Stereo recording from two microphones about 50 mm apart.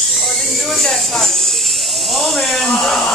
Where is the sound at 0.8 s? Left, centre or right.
Centre.